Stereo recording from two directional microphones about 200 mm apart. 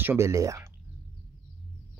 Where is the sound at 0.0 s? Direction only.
10° right (ahead or behind).